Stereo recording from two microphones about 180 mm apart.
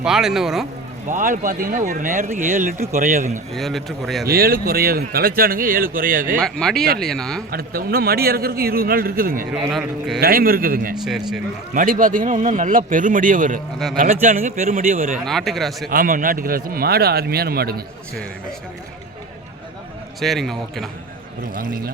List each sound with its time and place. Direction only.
0.0 s speech: 5° right (ahead or behind)
1.0 s a man's voice: 45° right (ahead or behind)
3.5 s speech: centre (ahead or behind)
4.2 s speech: 55° right (ahead or behind)
6.4 s speech: centre (ahead or behind)
7.5 s speech: 55° right (ahead or behind)
11.0 s speech: centre (ahead or behind)
11.7 s a man's voice: 50° right (ahead or behind)
15.2 s speech: centre (ahead or behind)
15.9 s speech: 50° right (ahead or behind)
20.1 s speech: centre (ahead or behind)
21.5 s a man's voice: 45° left (ahead or behind)